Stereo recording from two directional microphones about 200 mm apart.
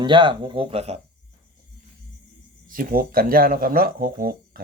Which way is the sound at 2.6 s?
45° right (ahead or behind).